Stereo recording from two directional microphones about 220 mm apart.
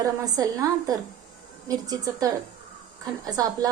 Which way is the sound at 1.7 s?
15° right (ahead or behind).